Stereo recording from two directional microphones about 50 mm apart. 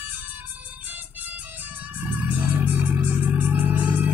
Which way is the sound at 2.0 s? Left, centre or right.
Right.